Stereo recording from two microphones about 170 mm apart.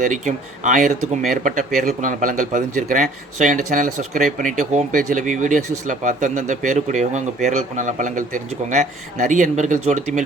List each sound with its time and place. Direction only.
0.0 s speech: 45° right (ahead or behind)